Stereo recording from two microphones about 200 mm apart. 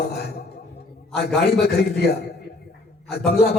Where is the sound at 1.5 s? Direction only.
55° left (ahead or behind).